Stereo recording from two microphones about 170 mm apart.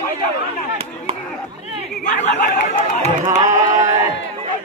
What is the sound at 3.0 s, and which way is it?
Music, 45° right (ahead or behind).